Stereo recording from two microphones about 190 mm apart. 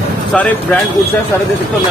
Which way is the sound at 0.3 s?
5° left (ahead or behind).